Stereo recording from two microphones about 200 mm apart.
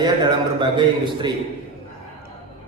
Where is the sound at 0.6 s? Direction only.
25° right (ahead or behind).